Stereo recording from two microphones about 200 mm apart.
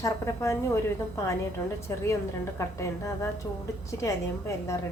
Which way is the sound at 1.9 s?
15° left (ahead or behind).